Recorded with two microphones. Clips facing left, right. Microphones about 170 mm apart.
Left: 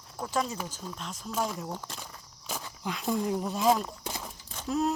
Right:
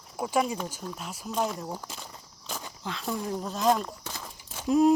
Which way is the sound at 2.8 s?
15° left (ahead or behind).